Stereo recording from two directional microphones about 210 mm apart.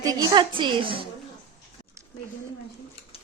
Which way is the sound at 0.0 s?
15° right (ahead or behind).